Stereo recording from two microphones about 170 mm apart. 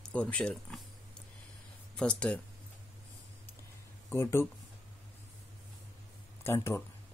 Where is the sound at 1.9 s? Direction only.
5° left (ahead or behind).